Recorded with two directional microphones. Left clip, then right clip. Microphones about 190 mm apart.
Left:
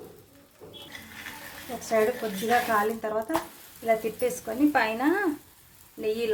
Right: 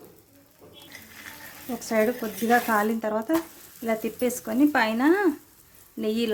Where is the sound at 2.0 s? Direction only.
55° right (ahead or behind).